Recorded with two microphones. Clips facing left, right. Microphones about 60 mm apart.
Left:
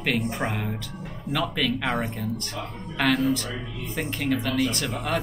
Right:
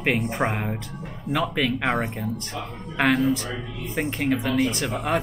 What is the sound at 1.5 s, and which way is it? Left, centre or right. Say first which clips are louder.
Speech: right 2 dB; centre.